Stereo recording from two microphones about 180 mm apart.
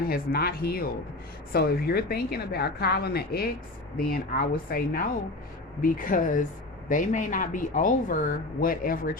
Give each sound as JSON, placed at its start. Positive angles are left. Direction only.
{"t": 0.1, "sound": "a woman's voice", "side_deg": 55}